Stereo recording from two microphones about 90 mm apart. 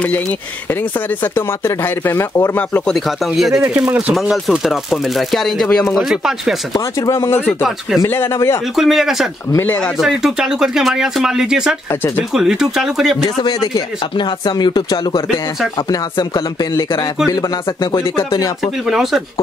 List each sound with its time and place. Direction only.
1.2 s speech: 25° left (ahead or behind)
2.9 s speech: centre (ahead or behind)
3.6 s speech: 15° right (ahead or behind)
4.1 s speech: 5° right (ahead or behind)
5.9 s speech: 5° right (ahead or behind)
6.7 s speech: 40° left (ahead or behind)
8.7 s speech: 5° right (ahead or behind)
13.4 s speech: 50° left (ahead or behind)
18.9 s speech: 5° right (ahead or behind)